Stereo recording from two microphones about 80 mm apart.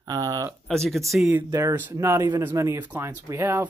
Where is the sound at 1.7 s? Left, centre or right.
Right.